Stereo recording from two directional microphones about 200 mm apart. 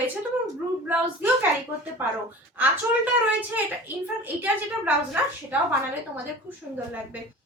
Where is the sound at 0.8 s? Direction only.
10° right (ahead or behind).